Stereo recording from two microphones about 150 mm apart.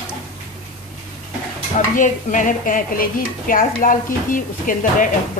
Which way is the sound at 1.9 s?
60° left (ahead or behind).